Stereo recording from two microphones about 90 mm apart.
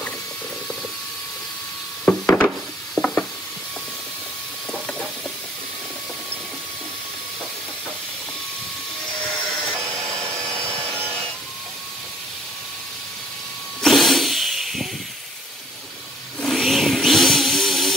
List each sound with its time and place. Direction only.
2.0 s wood: 15° left (ahead or behind)
3.0 s sizzle: 40° left (ahead or behind)
9.8 s a sound: 35° right (ahead or behind)
10.7 s wood: 30° right (ahead or behind)
13.8 s a sound: centre (ahead or behind)
16.3 s vehicle: 5° left (ahead or behind)